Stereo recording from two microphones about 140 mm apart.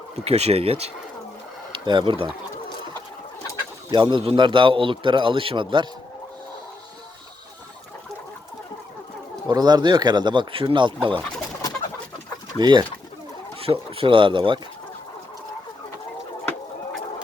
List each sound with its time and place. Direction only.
0.3 s speech: 45° right (ahead or behind)
1.7 s speech: 35° right (ahead or behind)
3.9 s a man's voice: 35° right (ahead or behind)
9.3 s a man's voice: 30° right (ahead or behind)
12.5 s a man's voice: 35° right (ahead or behind)